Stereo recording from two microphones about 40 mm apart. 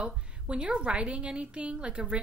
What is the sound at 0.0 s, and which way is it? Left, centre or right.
A woman's voice, right.